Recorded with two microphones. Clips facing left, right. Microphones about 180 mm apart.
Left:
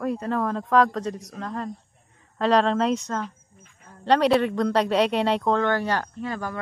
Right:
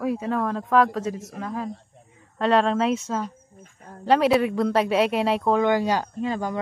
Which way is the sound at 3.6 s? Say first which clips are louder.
Right 7 dB; 40° right (ahead or behind).